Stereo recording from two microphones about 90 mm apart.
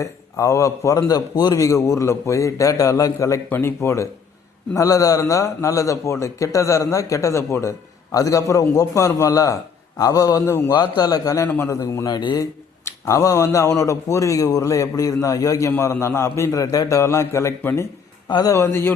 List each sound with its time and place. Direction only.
0.0 s a man's voice: 35° left (ahead or behind)
11.4 s a man's voice: 30° left (ahead or behind)